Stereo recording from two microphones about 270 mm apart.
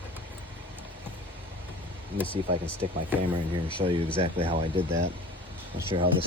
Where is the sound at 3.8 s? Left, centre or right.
Right.